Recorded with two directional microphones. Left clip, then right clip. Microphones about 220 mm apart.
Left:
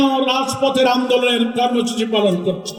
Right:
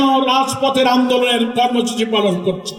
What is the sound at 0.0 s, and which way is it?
A man's voice, 20° right (ahead or behind).